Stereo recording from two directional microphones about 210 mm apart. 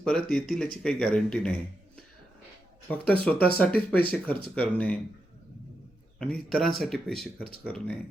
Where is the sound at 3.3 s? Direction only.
45° left (ahead or behind).